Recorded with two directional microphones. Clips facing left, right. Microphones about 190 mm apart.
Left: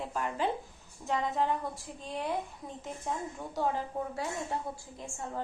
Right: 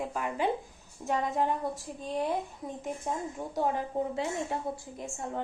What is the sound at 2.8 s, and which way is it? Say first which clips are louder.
Speech: right 2 dB; 20° right (ahead or behind).